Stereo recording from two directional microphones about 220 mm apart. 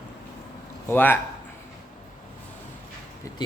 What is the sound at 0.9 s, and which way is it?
Speech, 10° left (ahead or behind).